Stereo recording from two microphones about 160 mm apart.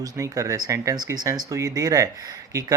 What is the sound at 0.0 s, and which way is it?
Speech, 20° right (ahead or behind).